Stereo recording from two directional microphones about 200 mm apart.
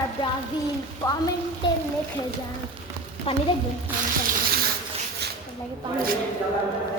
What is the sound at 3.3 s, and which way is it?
Speech, 30° left (ahead or behind).